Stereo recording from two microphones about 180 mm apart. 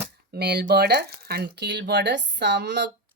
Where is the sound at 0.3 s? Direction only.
65° right (ahead or behind).